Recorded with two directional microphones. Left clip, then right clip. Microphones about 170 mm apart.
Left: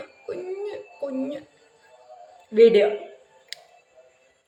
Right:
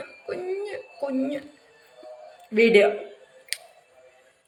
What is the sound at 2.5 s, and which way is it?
Speech, 15° left (ahead or behind).